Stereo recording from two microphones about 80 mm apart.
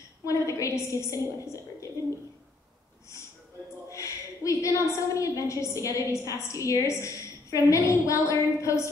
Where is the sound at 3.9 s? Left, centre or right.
Left.